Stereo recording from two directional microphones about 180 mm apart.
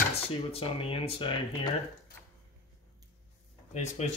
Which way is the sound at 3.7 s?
40° left (ahead or behind).